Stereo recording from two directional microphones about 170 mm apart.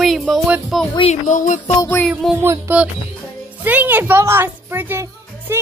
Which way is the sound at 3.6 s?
10° right (ahead or behind).